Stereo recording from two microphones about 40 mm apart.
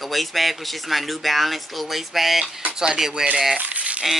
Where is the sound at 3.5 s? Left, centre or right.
Right.